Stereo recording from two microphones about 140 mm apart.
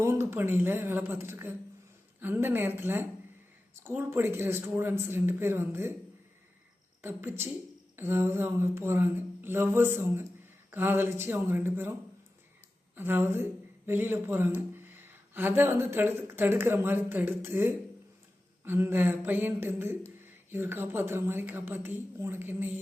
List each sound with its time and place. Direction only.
0.0 s a woman's voice: 20° right (ahead or behind)
7.0 s a woman's voice: 15° right (ahead or behind)
13.0 s a woman's voice: 15° right (ahead or behind)